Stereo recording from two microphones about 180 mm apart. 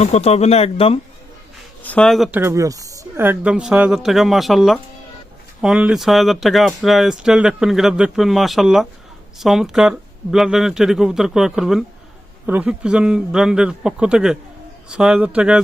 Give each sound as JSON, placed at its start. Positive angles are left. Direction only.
{"t": 0.0, "sound": "speech", "side_deg": 35}
{"t": 1.8, "sound": "speech", "side_deg": 5}
{"t": 2.4, "sound": "speech", "side_deg": -15}